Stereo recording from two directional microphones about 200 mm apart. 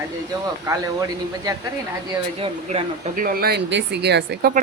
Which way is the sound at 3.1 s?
45° right (ahead or behind).